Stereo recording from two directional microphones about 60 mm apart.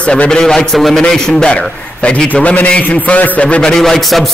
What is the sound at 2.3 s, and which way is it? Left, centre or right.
A man's voice, left.